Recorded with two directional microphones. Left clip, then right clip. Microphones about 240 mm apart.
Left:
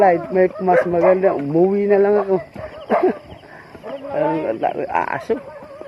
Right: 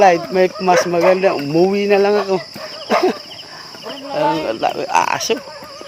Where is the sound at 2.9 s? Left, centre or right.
Centre.